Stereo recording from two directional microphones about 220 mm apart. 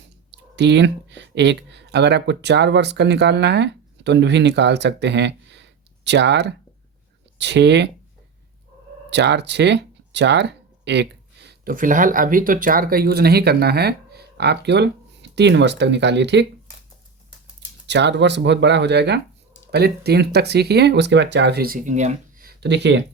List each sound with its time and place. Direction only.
0.3 s speech: 50° right (ahead or behind)
9.0 s speech: 50° right (ahead or behind)
17.8 s speech: 50° right (ahead or behind)